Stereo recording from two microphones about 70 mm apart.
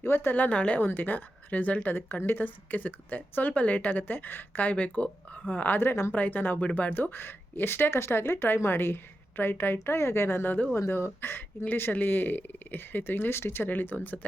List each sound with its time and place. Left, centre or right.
0.0 s a woman's voice: left